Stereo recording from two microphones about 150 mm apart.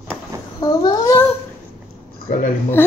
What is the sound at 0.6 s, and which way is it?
Speech, 30° left (ahead or behind).